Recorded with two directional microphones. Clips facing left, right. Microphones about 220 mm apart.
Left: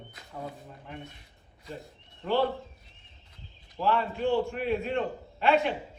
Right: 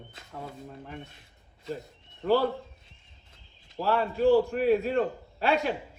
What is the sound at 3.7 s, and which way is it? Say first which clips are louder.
A man's voice: right 1 dB; 40° right (ahead or behind).